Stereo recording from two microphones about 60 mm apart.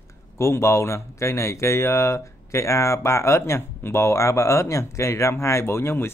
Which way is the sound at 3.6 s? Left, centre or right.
Left.